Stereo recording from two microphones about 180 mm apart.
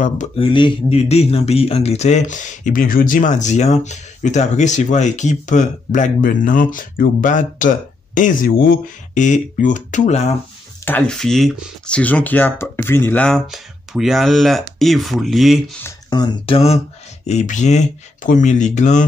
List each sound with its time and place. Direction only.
0.4 s speech: 25° left (ahead or behind)
10.9 s speech: 5° left (ahead or behind)
16.1 s speech: 25° left (ahead or behind); by 19.0 s 40° left (ahead or behind)